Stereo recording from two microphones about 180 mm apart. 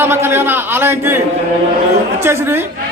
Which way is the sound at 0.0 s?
10° right (ahead or behind).